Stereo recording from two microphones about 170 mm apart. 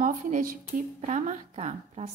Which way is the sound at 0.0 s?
45° right (ahead or behind).